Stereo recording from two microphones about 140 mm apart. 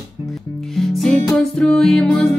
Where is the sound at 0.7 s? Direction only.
Centre (ahead or behind).